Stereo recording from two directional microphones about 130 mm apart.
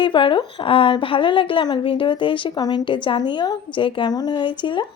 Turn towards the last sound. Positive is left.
turn(degrees=35)  # may be behind; listen again after turning